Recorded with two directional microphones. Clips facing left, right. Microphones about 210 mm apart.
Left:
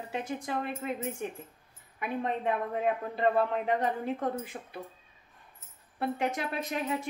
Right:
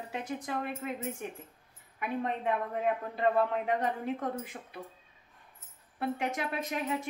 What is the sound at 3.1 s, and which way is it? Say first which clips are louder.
A man's voice: left 1 dB; 30° left (ahead or behind).